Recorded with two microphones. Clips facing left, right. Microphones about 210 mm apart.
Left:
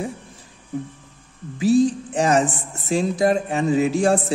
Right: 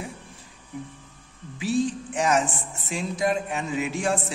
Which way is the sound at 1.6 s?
40° left (ahead or behind).